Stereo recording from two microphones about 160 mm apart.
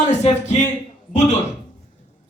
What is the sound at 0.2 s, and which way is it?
Speech, 45° left (ahead or behind).